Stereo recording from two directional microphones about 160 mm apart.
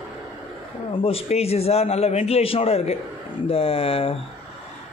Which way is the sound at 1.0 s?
40° left (ahead or behind).